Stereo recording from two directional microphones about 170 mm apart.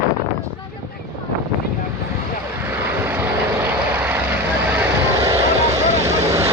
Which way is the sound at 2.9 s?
15° right (ahead or behind).